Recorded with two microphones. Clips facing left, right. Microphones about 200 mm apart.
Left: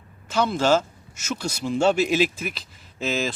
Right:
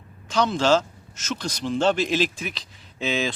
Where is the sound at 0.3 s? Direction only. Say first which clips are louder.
Even; 5° left (ahead or behind).